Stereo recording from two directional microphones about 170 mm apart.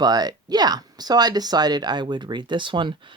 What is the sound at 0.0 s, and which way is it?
Speech, 25° right (ahead or behind).